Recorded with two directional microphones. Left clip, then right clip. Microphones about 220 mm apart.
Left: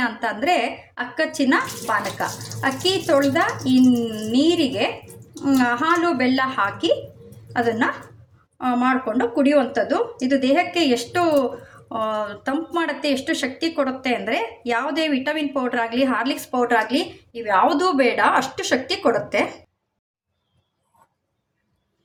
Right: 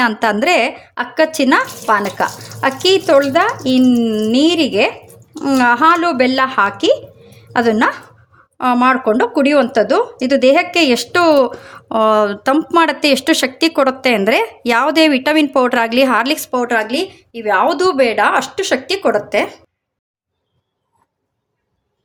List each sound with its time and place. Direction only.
0.0 s speech: 50° right (ahead or behind); by 19.5 s 35° right (ahead or behind)